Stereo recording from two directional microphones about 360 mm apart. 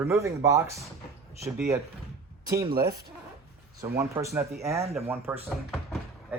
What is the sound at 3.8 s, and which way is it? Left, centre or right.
Speech, centre.